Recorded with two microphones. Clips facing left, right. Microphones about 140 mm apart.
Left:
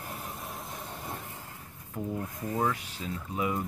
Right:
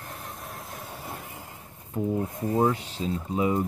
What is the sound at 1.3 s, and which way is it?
Speech, 20° right (ahead or behind).